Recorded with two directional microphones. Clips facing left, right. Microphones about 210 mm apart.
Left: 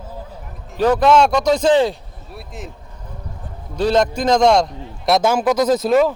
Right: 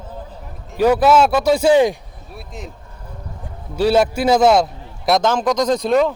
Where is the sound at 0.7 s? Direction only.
10° right (ahead or behind).